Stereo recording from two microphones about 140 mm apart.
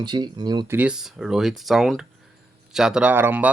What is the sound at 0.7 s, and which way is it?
Speech, 10° right (ahead or behind).